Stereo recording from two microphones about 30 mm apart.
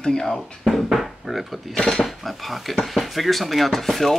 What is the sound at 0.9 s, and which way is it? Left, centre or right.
Speech, centre.